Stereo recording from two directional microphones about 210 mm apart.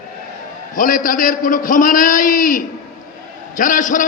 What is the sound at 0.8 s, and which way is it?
A man's voice, 40° left (ahead or behind).